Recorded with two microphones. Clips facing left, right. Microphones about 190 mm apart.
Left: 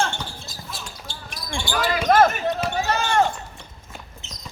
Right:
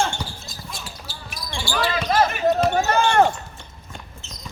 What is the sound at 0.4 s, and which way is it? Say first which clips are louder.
Basketball bounce: even; centre (ahead or behind).